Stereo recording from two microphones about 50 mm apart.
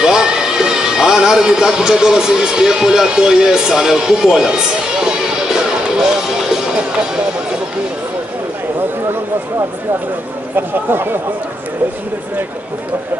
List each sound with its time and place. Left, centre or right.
0.0 s speech: centre
5.9 s music: centre
10.5 s speech: right